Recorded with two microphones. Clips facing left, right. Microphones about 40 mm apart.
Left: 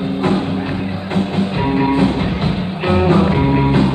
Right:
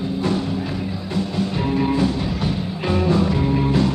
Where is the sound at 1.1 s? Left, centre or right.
Left.